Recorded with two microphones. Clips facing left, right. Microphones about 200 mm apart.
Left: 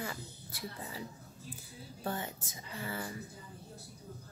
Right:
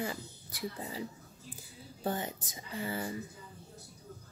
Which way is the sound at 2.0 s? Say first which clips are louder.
Right 3 dB; 20° right (ahead or behind).